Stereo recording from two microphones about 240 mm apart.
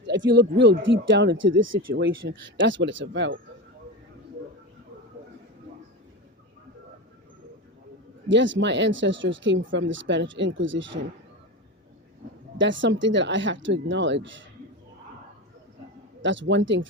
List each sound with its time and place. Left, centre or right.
0.0 s speech: right
8.3 s speech: right
12.5 s speech: right
16.2 s speech: right